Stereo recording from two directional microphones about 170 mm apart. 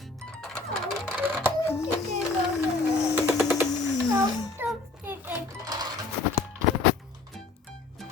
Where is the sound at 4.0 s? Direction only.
20° right (ahead or behind).